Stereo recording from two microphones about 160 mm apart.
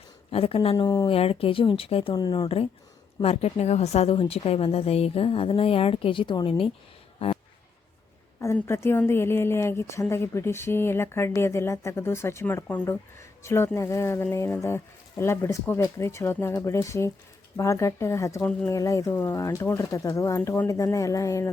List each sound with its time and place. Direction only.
0.3 s speech: 35° left (ahead or behind)
0.9 s speech: 25° left (ahead or behind)
1.1 s speech: 35° left (ahead or behind)
8.4 s a woman's voice: 15° left (ahead or behind)